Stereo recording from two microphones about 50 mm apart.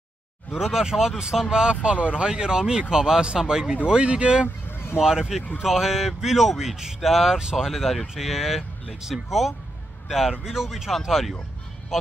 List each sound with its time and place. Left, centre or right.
0.6 s speech: centre
4.6 s vehicle: left
5.6 s speech: centre